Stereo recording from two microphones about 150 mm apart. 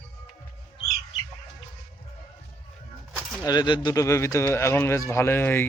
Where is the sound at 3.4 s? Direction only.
30° left (ahead or behind).